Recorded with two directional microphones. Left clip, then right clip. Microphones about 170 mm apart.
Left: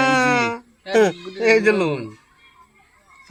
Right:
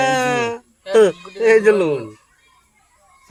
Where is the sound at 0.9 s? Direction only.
30° right (ahead or behind).